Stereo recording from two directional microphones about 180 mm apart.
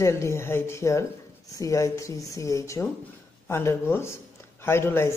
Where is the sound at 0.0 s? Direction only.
15° left (ahead or behind).